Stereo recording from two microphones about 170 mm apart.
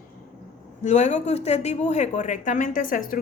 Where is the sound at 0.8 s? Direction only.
45° left (ahead or behind).